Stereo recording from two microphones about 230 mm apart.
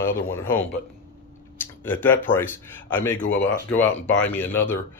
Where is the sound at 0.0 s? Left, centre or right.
Centre.